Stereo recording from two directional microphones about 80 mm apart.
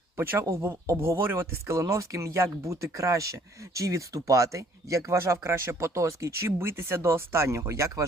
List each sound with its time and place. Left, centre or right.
0.2 s speech: right